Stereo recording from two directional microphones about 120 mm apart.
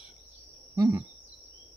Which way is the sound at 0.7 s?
30° right (ahead or behind).